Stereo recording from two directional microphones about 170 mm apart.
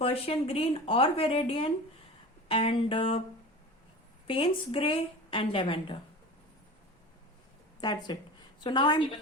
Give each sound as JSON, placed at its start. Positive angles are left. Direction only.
{"t": 0.0, "sound": "speech", "side_deg": 35}
{"t": 4.3, "sound": "speech", "side_deg": 30}
{"t": 7.8, "sound": "a woman's voice", "side_deg": 25}